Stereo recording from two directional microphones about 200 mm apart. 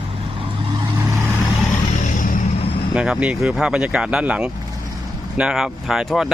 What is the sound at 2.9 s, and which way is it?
Speech, 5° right (ahead or behind).